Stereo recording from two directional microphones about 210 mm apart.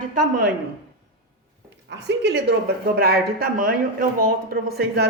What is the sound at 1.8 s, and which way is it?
Speech, 55° right (ahead or behind).